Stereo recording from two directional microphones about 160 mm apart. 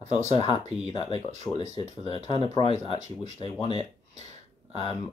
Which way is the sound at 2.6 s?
40° right (ahead or behind).